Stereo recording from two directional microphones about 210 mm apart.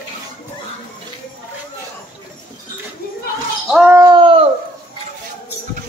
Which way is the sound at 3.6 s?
5° right (ahead or behind).